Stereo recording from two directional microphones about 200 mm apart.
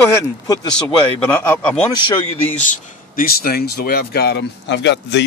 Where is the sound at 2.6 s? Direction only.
45° left (ahead or behind).